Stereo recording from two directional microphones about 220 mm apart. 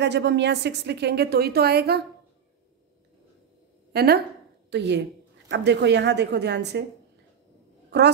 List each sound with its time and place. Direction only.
0.0 s a woman's voice: 50° right (ahead or behind)
3.9 s a woman's voice: 45° right (ahead or behind)